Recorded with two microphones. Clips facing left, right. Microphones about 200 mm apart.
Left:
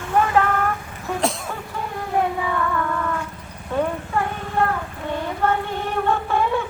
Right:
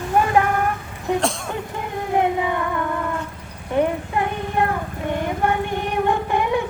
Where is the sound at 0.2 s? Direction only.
15° right (ahead or behind).